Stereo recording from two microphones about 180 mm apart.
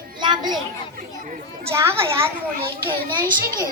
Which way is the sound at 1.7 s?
15° right (ahead or behind).